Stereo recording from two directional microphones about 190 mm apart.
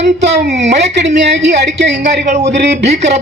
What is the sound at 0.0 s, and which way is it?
A woman's voice, 65° right (ahead or behind).